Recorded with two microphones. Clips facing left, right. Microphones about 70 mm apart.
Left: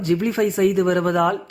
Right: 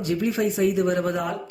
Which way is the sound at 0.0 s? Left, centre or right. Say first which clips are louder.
Left 4 dB; left.